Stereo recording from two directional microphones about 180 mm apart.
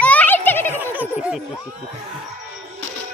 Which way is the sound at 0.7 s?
10° right (ahead or behind).